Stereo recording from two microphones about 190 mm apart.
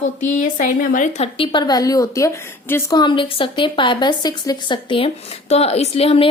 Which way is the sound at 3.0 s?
25° left (ahead or behind).